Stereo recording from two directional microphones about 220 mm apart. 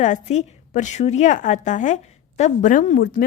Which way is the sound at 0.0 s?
35° left (ahead or behind).